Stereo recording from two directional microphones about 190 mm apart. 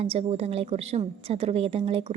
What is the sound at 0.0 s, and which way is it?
A woman's voice, 30° right (ahead or behind).